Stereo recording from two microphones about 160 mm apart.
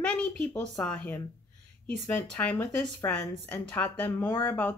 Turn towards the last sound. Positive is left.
turn(degrees=15)  # may be behind; listen again after turning